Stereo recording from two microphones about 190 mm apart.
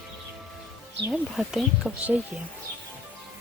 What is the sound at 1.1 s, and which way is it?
Speech, centre (ahead or behind).